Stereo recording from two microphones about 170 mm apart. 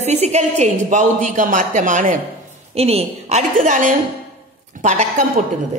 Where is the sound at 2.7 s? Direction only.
35° right (ahead or behind).